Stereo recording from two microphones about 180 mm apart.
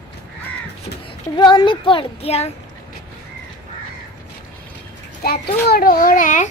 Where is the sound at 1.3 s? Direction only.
25° left (ahead or behind).